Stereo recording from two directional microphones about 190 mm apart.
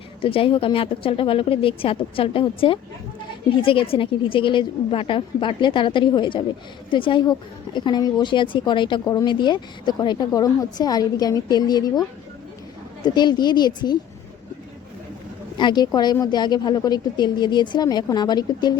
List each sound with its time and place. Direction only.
0.2 s a woman's voice: 30° left (ahead or behind)
15.5 s a woman's voice: 25° left (ahead or behind)